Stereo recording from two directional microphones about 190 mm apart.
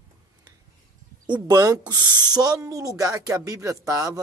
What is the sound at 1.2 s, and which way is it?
Speech, 20° right (ahead or behind).